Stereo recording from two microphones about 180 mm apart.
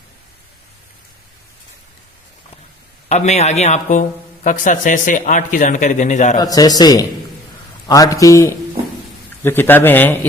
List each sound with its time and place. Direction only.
3.1 s a man's voice: 40° left (ahead or behind)
6.4 s a man's voice: 20° left (ahead or behind)